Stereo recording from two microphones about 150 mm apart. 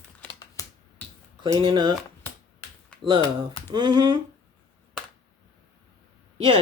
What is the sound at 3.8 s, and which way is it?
Speech, 30° right (ahead or behind).